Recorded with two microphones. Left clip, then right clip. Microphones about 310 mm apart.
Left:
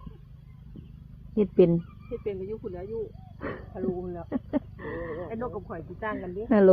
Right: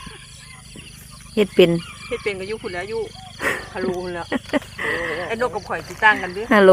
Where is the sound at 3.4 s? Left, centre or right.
Centre.